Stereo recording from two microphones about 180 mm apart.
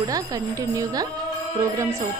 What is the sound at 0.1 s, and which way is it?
Speech, 20° right (ahead or behind).